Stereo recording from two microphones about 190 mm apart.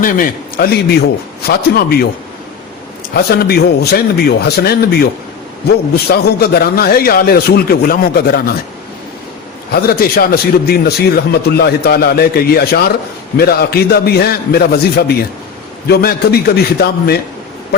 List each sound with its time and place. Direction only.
0.0 s a man's voice: 50° left (ahead or behind)
3.2 s a man's voice: 55° left (ahead or behind)
9.7 s a man's voice: 55° left (ahead or behind)